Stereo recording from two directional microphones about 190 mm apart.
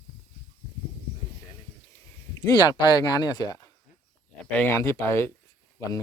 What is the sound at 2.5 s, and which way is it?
Speech, 20° left (ahead or behind).